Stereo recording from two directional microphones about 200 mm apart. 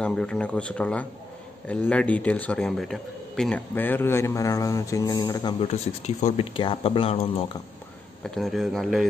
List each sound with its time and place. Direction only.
0.0 s speech: 5° left (ahead or behind); by 5.7 s 20° left (ahead or behind)
5.7 s speech: 35° left (ahead or behind)
8.4 s speech: centre (ahead or behind)